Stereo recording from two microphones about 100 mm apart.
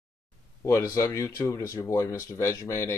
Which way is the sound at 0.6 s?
30° left (ahead or behind).